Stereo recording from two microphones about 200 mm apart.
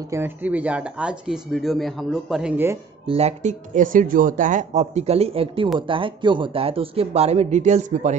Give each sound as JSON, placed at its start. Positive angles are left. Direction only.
{"t": 0.1, "sound": "speech", "side_deg": -10}
{"t": 3.1, "sound": "speech", "side_deg": -30}